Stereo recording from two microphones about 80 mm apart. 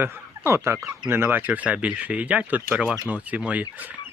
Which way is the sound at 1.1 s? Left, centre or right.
Right.